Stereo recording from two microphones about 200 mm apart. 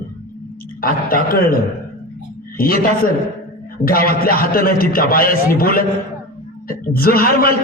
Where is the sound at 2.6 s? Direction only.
45° left (ahead or behind).